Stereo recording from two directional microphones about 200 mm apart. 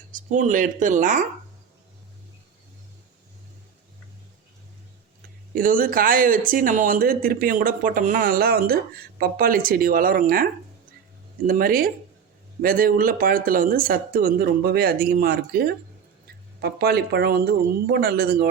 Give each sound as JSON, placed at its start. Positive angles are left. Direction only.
{"t": 0.1, "sound": "speech", "side_deg": -40}
{"t": 5.5, "sound": "speech", "side_deg": -45}